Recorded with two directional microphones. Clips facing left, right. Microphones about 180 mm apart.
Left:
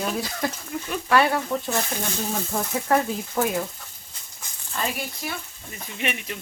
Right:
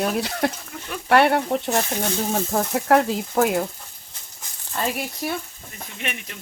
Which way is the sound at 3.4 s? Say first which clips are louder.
Right 4 dB; 55° right (ahead or behind).